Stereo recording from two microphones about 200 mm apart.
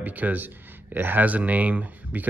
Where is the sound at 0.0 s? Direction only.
10° right (ahead or behind).